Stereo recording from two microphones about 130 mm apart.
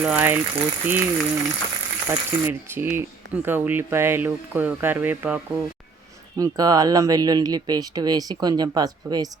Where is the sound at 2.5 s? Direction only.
20° right (ahead or behind).